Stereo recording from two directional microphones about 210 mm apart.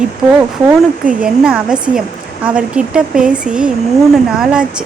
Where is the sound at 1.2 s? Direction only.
5° right (ahead or behind).